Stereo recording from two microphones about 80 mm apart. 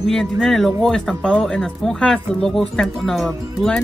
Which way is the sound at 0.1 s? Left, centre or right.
Centre.